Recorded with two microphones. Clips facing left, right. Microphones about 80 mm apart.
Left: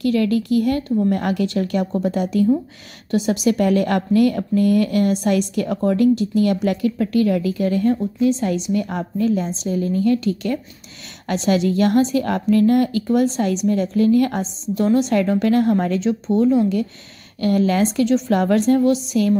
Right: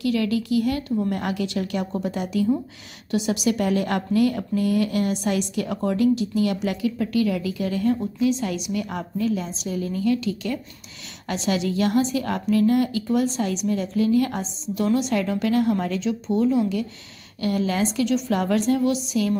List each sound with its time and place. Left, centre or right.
0.0 s speech: left
14.8 s speech: left
16.0 s speech: left
18.0 s speech: left